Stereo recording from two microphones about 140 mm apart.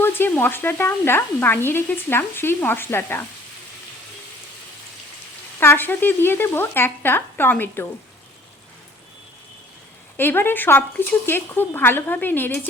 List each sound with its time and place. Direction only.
0.0 s speech: 15° left (ahead or behind)
5.5 s speech: 15° left (ahead or behind)
10.2 s speech: 15° left (ahead or behind)